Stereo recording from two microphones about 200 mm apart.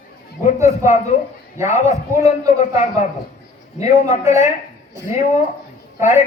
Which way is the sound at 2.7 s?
30° left (ahead or behind).